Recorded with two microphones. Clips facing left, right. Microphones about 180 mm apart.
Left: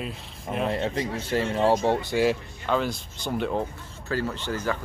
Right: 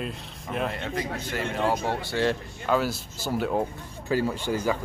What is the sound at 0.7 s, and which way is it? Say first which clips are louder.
Speech: left 4 dB; 30° left (ahead or behind).